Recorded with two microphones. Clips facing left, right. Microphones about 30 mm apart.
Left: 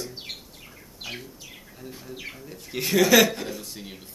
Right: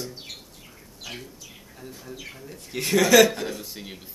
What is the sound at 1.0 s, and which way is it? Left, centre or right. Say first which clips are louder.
Speech: left 2 dB; left.